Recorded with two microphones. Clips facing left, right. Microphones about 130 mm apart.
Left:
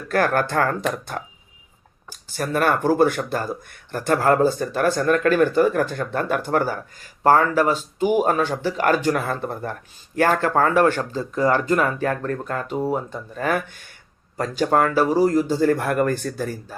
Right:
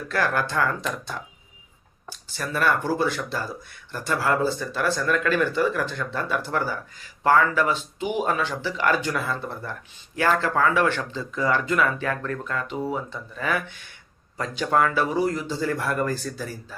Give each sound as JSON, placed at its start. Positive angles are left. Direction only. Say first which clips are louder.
{"t": 0.1, "sound": "speech", "louder": "left 5 dB", "side_deg": 50}
{"t": 2.3, "sound": "speech", "louder": "left 3 dB", "side_deg": 45}